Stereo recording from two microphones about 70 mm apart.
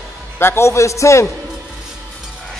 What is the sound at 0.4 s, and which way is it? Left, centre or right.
Speech, left.